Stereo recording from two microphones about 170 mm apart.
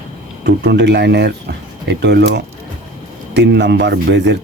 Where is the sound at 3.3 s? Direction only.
90° right.